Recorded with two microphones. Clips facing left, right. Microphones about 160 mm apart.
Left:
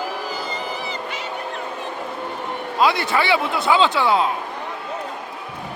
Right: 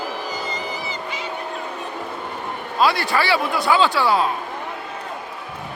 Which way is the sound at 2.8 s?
20° left (ahead or behind).